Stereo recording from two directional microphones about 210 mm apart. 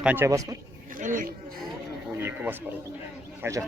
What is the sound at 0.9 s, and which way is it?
Speech, 40° right (ahead or behind).